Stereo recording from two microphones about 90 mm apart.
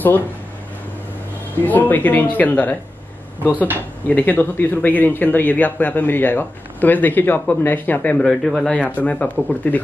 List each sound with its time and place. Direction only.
1.6 s speech: 20° left (ahead or behind)